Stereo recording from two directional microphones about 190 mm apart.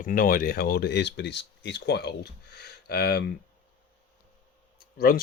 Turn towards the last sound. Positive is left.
turn(degrees=55)  # may be behind; listen again after turning